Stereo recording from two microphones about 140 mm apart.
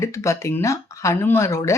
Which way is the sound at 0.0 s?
20° left (ahead or behind).